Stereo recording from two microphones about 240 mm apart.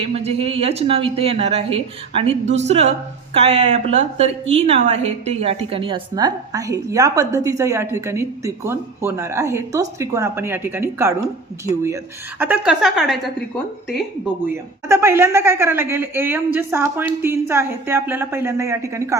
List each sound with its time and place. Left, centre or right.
0.0 s a woman's voice: right; by 13.3 s centre
14.4 s a woman's voice: centre